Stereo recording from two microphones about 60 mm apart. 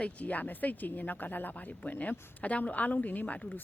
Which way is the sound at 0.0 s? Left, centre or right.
Left.